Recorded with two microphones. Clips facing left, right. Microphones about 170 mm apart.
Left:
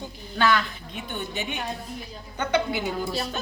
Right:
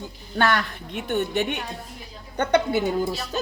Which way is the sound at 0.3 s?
60° right (ahead or behind).